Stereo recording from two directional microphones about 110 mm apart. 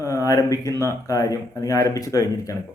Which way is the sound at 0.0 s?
30° left (ahead or behind).